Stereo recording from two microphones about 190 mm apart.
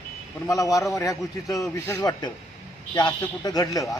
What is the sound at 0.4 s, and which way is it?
Speech, 15° left (ahead or behind).